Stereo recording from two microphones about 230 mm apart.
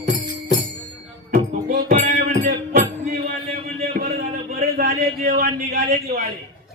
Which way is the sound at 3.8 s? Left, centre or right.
Right.